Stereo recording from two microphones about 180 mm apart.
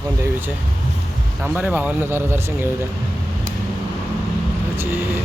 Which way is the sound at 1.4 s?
10° right (ahead or behind).